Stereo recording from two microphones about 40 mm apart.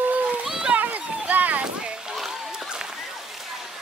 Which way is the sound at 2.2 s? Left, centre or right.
Centre.